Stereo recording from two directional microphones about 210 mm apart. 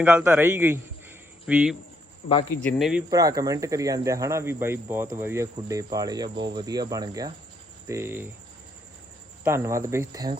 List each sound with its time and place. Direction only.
0.0 s a man's voice: 10° right (ahead or behind)
2.2 s speech: 30° left (ahead or behind)
2.6 s speech: centre (ahead or behind)
3.1 s speech: 15° right (ahead or behind)
9.4 s speech: 10° right (ahead or behind)